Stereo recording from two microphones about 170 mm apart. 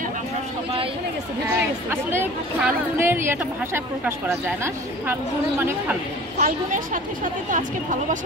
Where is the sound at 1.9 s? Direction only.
15° right (ahead or behind).